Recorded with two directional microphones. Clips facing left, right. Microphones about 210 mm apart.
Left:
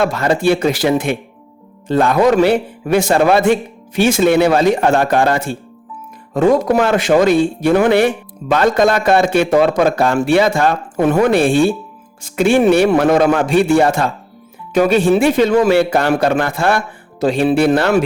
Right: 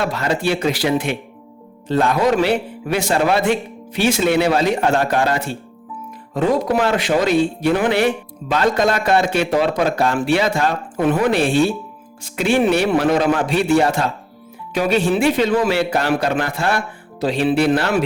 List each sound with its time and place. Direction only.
0.0 s a man's voice: 50° left (ahead or behind)